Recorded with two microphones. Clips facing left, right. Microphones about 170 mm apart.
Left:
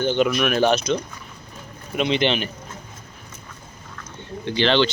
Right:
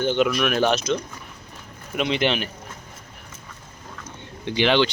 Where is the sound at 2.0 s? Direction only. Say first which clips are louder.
Left 2 dB; 5° right (ahead or behind).